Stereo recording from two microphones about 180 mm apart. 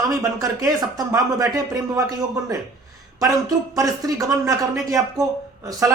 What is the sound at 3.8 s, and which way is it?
Speech, 20° right (ahead or behind).